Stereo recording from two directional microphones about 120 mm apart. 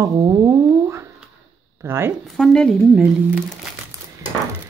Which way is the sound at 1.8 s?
20° right (ahead or behind).